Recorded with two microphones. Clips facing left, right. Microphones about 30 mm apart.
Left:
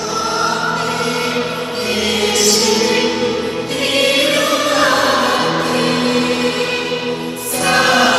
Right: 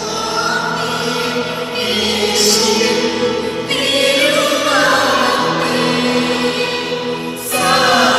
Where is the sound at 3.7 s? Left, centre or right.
Right.